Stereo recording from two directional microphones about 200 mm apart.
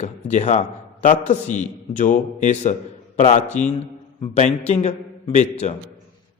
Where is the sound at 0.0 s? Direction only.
35° left (ahead or behind).